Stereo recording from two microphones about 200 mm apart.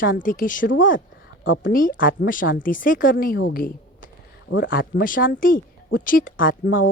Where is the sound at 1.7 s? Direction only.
45° left (ahead or behind).